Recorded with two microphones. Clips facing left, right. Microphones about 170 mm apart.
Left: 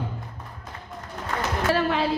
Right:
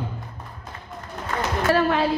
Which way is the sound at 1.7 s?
45° right (ahead or behind).